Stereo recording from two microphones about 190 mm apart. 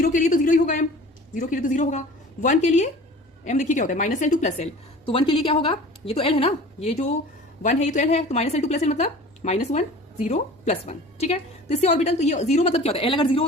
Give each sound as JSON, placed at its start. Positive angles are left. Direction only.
{"t": 0.1, "sound": "a man's voice", "side_deg": 45}